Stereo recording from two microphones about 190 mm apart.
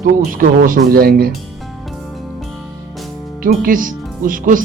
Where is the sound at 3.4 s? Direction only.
45° right (ahead or behind).